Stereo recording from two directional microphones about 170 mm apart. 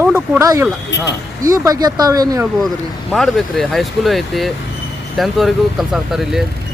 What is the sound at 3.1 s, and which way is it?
Speech, centre (ahead or behind).